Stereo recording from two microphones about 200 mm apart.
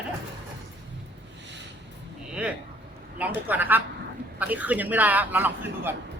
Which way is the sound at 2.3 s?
5° right (ahead or behind).